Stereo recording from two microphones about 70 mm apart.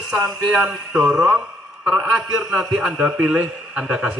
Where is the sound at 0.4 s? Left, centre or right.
Centre.